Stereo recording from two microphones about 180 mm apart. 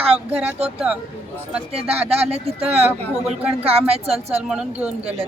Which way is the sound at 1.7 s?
35° right (ahead or behind).